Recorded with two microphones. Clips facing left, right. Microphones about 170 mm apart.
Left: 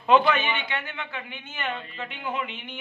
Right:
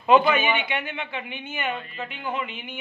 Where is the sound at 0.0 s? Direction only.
5° right (ahead or behind).